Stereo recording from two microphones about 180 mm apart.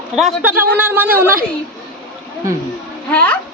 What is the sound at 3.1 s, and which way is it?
Speech, 10° left (ahead or behind).